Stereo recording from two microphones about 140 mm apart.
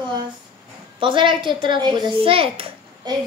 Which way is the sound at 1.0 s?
35° right (ahead or behind).